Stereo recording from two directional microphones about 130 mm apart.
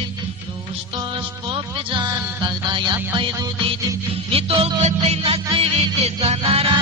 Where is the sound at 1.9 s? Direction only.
35° right (ahead or behind).